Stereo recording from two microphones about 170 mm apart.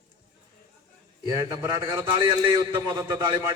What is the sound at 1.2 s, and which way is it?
A man's voice, 20° right (ahead or behind).